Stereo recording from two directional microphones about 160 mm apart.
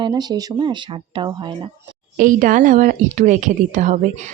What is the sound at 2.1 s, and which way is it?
Speech, 55° right (ahead or behind).